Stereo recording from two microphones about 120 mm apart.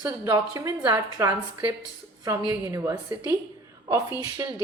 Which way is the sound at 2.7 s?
25° right (ahead or behind).